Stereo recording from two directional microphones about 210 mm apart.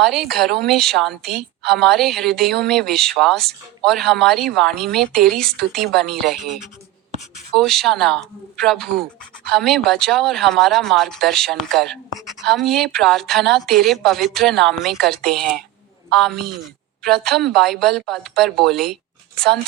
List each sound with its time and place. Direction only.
0.0 s a woman's voice: centre (ahead or behind)